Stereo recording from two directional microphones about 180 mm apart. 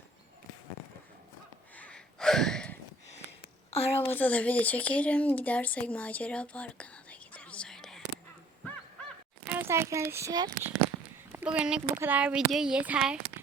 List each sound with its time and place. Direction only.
1.7 s gasp: 5° left (ahead or behind)
3.7 s a sound: 35° left (ahead or behind)
4.1 s speech: 10° left (ahead or behind)
9.5 s a child's voice: 10° right (ahead or behind)
11.3 s speech: 10° right (ahead or behind)